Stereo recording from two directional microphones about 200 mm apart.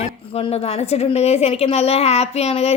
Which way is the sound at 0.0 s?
30° left (ahead or behind).